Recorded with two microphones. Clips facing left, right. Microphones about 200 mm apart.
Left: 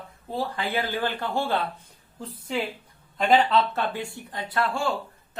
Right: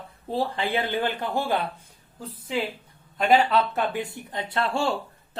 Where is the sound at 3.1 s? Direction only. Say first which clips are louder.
Even; 5° right (ahead or behind); by 4.9 s 25° right (ahead or behind).